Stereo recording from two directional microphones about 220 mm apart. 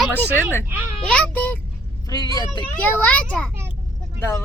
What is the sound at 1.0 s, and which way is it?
Speech, 5° left (ahead or behind).